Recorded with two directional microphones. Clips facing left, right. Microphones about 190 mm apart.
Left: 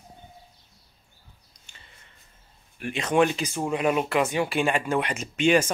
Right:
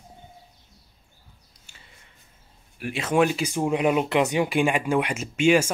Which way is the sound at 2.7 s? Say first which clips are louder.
Even; 5° right (ahead or behind).